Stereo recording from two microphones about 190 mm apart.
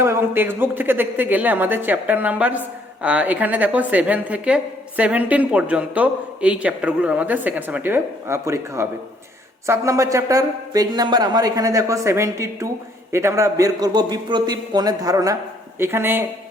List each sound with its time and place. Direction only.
0.0 s a man's voice: 15° right (ahead or behind)